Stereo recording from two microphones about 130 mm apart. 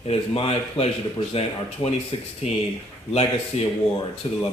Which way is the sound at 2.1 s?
45° left (ahead or behind).